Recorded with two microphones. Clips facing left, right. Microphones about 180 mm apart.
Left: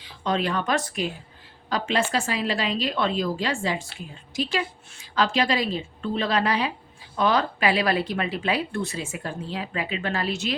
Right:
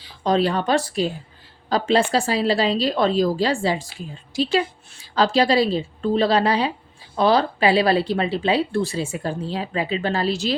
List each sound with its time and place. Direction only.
0.0 s speech: 35° right (ahead or behind)